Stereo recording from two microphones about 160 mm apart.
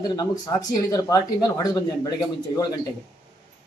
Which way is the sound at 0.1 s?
25° left (ahead or behind).